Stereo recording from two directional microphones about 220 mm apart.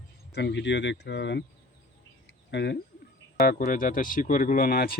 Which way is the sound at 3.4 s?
40° left (ahead or behind).